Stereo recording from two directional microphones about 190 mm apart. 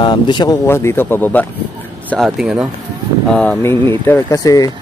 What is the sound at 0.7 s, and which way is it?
Speech, 10° left (ahead or behind).